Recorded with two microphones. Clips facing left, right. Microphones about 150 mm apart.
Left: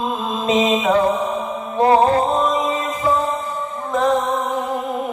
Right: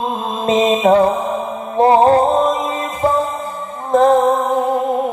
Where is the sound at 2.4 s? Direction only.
45° right (ahead or behind).